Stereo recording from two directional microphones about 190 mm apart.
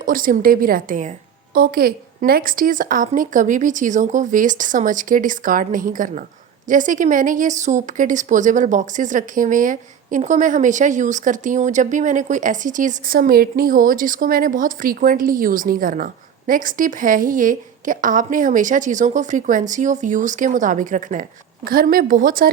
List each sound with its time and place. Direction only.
0.0 s speech: 45° right (ahead or behind)